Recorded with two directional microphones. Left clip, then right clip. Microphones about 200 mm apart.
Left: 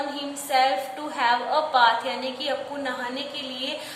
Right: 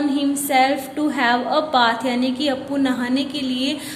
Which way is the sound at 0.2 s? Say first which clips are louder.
Right 4 dB; 35° right (ahead or behind).